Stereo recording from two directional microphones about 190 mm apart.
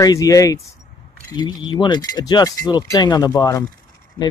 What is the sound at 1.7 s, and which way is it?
Speech, 20° left (ahead or behind).